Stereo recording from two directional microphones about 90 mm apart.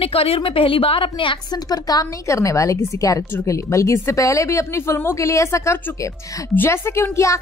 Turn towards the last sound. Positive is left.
turn(degrees=35)  # may be behind; listen again after turning